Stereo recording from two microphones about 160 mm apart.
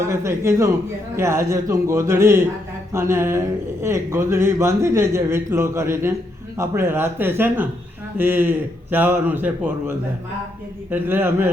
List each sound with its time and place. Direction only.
0.1 s speech: 15° right (ahead or behind)
10.9 s speech: 15° right (ahead or behind)